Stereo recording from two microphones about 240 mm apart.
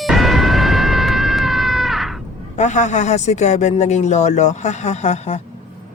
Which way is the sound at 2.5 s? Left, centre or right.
Left.